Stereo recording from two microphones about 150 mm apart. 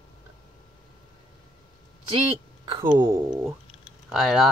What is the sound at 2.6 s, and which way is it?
Speech, 30° right (ahead or behind).